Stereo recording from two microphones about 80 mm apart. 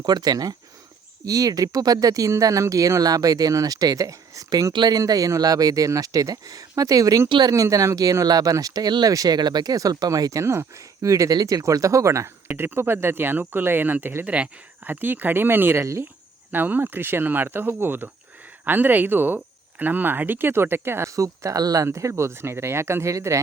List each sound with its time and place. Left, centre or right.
0.0 s speech: right
7.3 s speech: right
7.5 s speech: right
9.0 s speech: right
10.4 s speech: right
12.5 s speech: right
15.8 s speech: right
16.5 s speech: right